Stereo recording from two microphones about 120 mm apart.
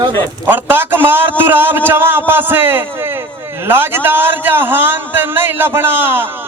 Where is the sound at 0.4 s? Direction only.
15° right (ahead or behind).